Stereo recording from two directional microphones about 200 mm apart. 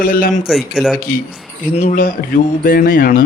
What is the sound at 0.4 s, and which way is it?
Speech, centre (ahead or behind).